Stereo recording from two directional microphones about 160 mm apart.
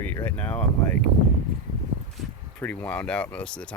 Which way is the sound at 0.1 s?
15° left (ahead or behind).